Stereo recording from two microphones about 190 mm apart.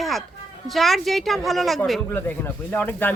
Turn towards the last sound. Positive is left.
turn(degrees=10)  # may be behind; listen again after turning